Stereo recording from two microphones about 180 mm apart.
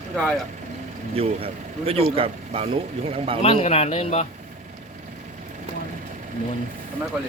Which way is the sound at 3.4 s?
35° left (ahead or behind).